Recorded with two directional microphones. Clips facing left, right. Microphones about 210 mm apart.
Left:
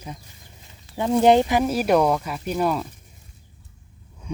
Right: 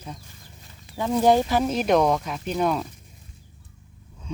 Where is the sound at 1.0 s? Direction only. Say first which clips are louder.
Left 3 dB; 20° left (ahead or behind).